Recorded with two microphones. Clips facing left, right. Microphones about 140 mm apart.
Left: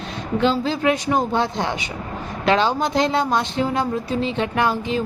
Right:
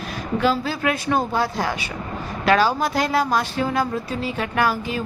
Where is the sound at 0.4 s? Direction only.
20° left (ahead or behind).